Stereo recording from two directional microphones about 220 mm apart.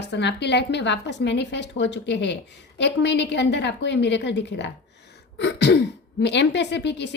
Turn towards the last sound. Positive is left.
turn(degrees=50)  # may be behind; listen again after turning